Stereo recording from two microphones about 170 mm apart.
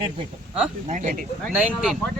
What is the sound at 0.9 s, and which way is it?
Speech, 45° right (ahead or behind).